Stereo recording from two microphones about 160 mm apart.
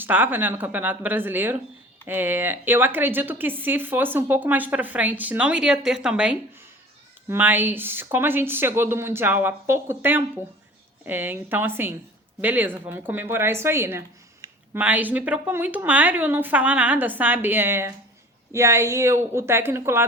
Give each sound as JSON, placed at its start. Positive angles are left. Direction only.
{"t": 0.0, "sound": "a woman's voice", "side_deg": -10}
{"t": 14.4, "sound": "a sound", "side_deg": -25}
{"t": 14.8, "sound": "a woman's voice", "side_deg": -10}